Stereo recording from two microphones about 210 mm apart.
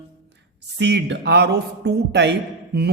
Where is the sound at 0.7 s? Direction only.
55° right (ahead or behind).